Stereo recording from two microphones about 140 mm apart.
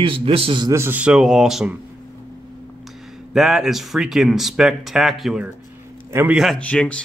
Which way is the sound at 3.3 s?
Centre (ahead or behind).